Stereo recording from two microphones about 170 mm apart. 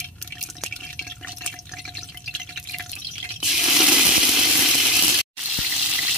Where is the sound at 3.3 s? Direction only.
5° right (ahead or behind).